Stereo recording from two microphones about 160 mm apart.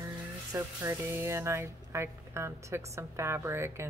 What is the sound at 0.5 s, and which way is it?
Speech, 20° right (ahead or behind).